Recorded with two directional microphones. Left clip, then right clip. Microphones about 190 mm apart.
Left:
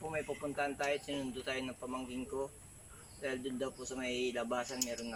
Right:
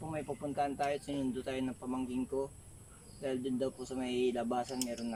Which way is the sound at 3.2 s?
30° right (ahead or behind).